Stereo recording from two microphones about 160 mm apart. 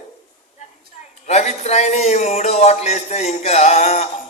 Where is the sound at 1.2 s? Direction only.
45° left (ahead or behind).